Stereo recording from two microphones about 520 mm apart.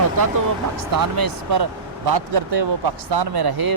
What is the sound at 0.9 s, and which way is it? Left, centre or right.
Speech, right.